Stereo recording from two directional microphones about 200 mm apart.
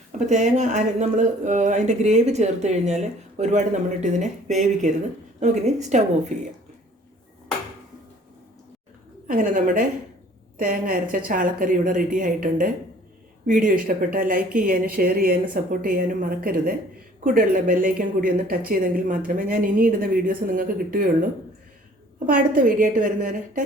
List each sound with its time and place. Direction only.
0.1 s speech: 35° right (ahead or behind)
9.2 s a woman's voice: 40° right (ahead or behind)
22.3 s speech: 45° right (ahead or behind)